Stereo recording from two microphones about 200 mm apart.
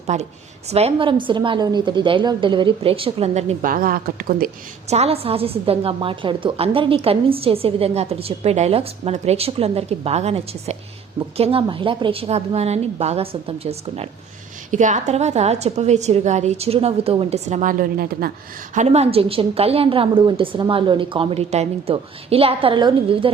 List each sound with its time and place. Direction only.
0.1 s a woman's voice: 35° right (ahead or behind)
3.6 s a woman's voice: 45° right (ahead or behind)
4.9 s a woman's voice: 30° right (ahead or behind); by 18.3 s 50° right (ahead or behind)
18.7 s a woman's voice: 35° right (ahead or behind)